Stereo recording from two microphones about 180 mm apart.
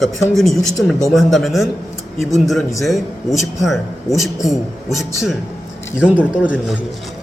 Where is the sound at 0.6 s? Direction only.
Centre (ahead or behind).